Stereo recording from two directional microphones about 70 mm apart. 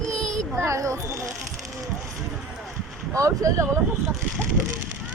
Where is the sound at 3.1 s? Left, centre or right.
Right.